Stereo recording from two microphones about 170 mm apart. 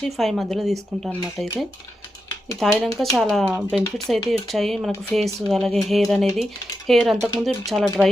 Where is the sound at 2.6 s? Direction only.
Centre (ahead or behind).